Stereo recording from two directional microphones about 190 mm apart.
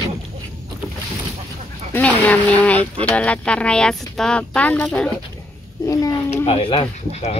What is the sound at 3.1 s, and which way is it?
Speech, 5° left (ahead or behind).